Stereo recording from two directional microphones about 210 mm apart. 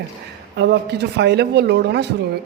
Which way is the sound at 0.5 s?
50° right (ahead or behind).